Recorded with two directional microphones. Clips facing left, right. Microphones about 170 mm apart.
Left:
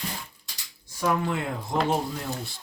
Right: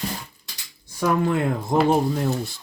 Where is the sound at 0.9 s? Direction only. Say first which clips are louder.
Right 5 dB; 55° right (ahead or behind).